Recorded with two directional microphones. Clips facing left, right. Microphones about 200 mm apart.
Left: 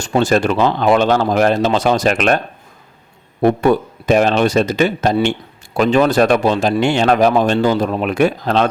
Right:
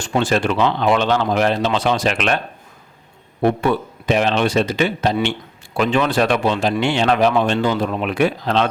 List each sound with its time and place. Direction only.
0.0 s speech: 40° left (ahead or behind)
3.4 s speech: 45° left (ahead or behind)